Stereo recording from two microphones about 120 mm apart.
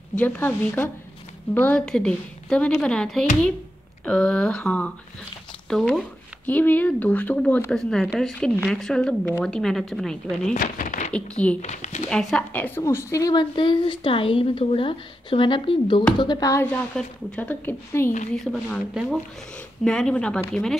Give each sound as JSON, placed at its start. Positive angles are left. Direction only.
{"t": 0.1, "sound": "speech", "side_deg": 15}
{"t": 7.7, "sound": "a woman's voice", "side_deg": 5}
{"t": 10.5, "sound": "a sound", "side_deg": 90}
{"t": 11.1, "sound": "speech", "side_deg": 10}
{"t": 11.6, "sound": "speech", "side_deg": 75}
{"t": 12.1, "sound": "a woman's voice", "side_deg": 5}
{"t": 12.8, "sound": "a woman's voice", "side_deg": 25}
{"t": 13.3, "sound": "a woman's voice", "side_deg": 40}
{"t": 16.7, "sound": "speech", "side_deg": 15}
{"t": 18.3, "sound": "a woman's voice", "side_deg": 5}